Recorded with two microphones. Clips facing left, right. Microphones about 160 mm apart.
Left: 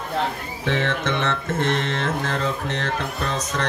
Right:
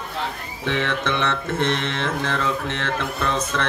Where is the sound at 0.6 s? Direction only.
45° left (ahead or behind).